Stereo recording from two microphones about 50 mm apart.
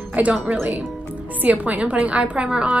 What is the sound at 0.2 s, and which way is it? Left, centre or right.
Speech, right.